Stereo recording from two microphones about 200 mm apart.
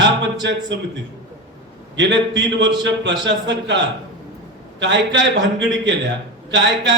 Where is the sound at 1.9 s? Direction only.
60° right (ahead or behind).